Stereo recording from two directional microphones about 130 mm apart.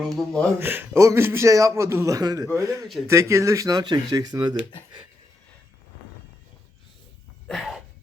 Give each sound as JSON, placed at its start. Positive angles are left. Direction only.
{"t": 0.0, "sound": "speech", "side_deg": 0}
{"t": 0.6, "sound": "a man's voice", "side_deg": -15}
{"t": 7.4, "sound": "a sound", "side_deg": 0}